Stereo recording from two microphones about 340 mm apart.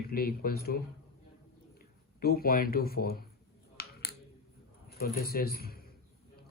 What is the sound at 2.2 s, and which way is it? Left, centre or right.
Speech, left.